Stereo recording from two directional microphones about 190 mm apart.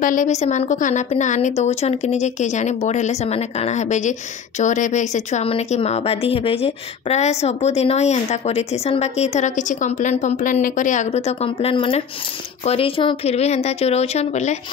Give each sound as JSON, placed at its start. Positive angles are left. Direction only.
{"t": 0.0, "sound": "a woman's voice", "side_deg": 45}